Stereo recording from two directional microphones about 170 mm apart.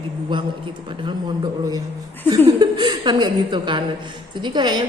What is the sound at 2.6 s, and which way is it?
A woman's voice, 25° right (ahead or behind).